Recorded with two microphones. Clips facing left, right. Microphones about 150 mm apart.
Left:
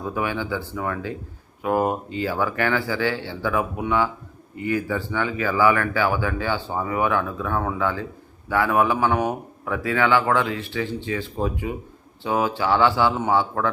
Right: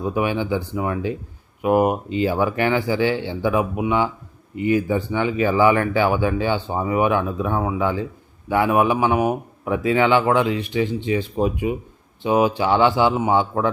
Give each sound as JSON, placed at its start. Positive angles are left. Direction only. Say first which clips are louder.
{"t": 0.0, "sound": "a man's voice", "louder": "right 4 dB", "side_deg": -20}